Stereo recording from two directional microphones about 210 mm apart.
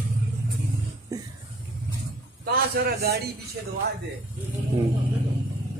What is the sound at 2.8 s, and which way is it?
Speech, 45° right (ahead or behind).